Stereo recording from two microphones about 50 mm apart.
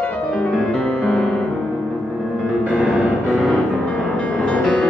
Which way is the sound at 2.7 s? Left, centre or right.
Right.